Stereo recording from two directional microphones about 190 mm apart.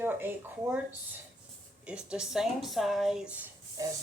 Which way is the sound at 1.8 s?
5° right (ahead or behind).